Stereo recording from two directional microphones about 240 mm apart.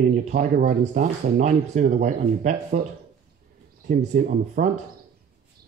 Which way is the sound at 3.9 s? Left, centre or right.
Right.